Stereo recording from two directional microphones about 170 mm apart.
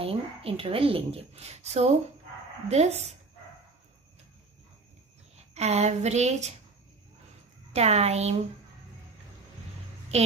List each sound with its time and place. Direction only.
0.0 s speech: 35° right (ahead or behind)
5.5 s speech: 40° right (ahead or behind)
7.7 s speech: 40° right (ahead or behind)